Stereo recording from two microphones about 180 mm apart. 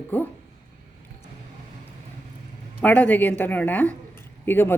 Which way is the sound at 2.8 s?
10° left (ahead or behind).